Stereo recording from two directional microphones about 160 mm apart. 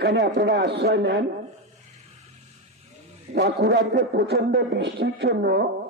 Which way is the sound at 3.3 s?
90° right.